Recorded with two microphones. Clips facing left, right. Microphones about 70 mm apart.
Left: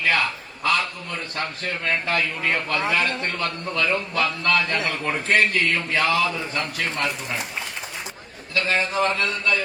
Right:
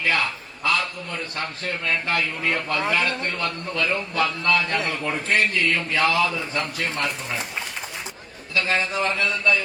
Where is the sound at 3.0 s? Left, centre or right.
Left.